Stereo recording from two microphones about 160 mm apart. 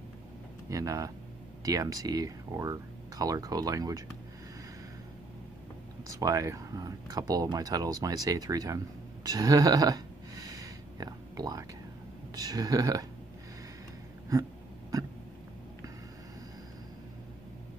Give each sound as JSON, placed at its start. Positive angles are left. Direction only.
{"t": 0.7, "sound": "speech", "side_deg": -20}
{"t": 6.1, "sound": "speech", "side_deg": -20}
{"t": 9.3, "sound": "a sound", "side_deg": -20}
{"t": 12.4, "sound": "speech", "side_deg": -25}